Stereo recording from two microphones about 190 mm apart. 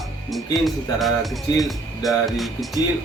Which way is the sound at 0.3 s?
Centre (ahead or behind).